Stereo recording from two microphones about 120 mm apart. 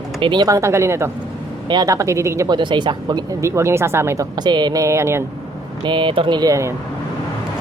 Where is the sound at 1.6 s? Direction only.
35° right (ahead or behind).